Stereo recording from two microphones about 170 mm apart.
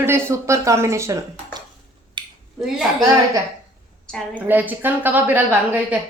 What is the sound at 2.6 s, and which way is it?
Speech, centre (ahead or behind).